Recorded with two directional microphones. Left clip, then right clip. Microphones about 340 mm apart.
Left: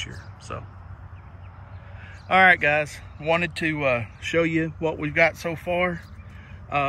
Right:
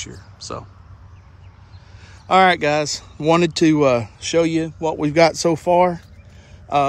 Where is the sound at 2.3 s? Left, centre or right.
Centre.